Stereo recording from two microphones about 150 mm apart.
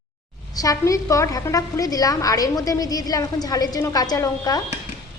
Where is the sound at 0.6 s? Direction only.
25° left (ahead or behind).